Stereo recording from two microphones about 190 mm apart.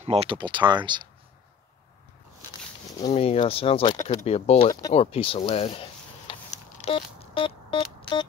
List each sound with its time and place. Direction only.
0.0 s speech: 35° right (ahead or behind)
3.1 s speech: 30° left (ahead or behind)
4.9 s a sound: 30° left (ahead or behind)